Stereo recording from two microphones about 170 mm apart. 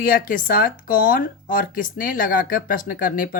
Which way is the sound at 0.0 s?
55° left (ahead or behind).